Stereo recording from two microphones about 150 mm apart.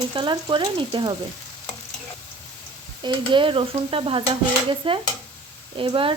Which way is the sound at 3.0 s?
35° right (ahead or behind).